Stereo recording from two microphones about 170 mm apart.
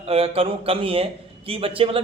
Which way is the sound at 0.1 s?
35° right (ahead or behind).